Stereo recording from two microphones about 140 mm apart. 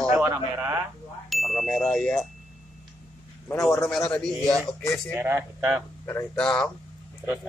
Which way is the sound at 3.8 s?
5° left (ahead or behind).